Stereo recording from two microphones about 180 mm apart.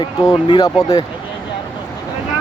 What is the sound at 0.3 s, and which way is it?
Speech, 25° left (ahead or behind).